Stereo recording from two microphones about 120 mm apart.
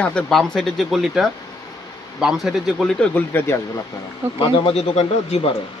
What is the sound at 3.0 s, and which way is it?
Speech, 15° left (ahead or behind).